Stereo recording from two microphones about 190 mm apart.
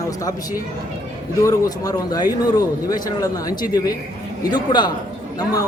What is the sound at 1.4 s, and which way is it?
Speech, 20° left (ahead or behind).